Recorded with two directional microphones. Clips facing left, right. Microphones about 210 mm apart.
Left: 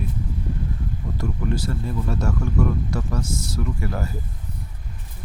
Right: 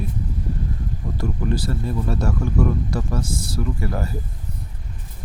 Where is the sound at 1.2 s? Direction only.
35° right (ahead or behind).